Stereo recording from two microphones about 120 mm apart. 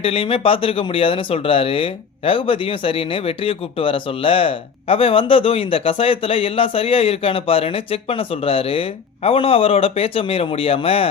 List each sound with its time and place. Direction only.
0.0 s speech: 50° left (ahead or behind)